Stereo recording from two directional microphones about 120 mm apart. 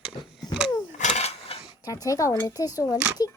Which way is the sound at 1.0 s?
60° left (ahead or behind).